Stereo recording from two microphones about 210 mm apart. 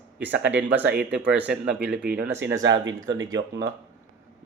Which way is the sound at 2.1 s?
55° right (ahead or behind).